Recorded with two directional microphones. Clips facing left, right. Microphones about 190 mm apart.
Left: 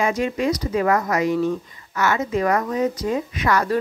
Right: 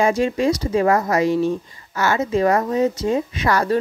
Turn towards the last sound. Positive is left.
turn(degrees=-30)  # may be behind; listen again after turning